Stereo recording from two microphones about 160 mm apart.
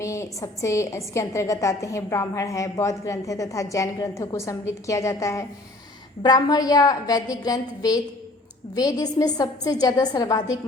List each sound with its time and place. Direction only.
0.0 s a woman's voice: 20° left (ahead or behind)